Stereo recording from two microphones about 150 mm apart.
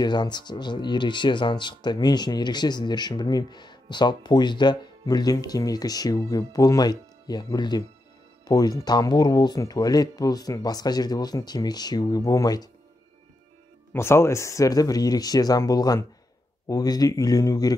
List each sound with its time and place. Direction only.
0.0 s speech: 30° left (ahead or behind)
13.9 s speech: 15° left (ahead or behind)